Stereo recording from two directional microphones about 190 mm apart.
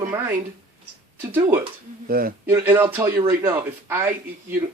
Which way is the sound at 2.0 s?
50° right (ahead or behind).